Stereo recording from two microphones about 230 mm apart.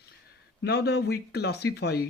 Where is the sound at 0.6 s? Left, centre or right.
Left.